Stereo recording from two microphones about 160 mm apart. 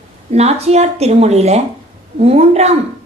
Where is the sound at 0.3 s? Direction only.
40° right (ahead or behind).